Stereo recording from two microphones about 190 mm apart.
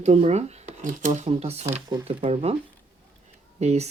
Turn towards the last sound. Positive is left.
turn(degrees=-35)  # may be behind; listen again after turning